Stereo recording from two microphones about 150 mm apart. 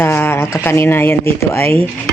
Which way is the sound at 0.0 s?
15° left (ahead or behind).